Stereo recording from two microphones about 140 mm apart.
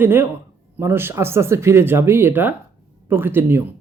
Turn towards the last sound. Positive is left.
turn(degrees=-15)  # may be behind; listen again after turning